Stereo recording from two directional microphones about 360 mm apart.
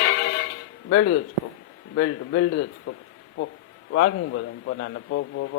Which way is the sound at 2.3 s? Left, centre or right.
Left.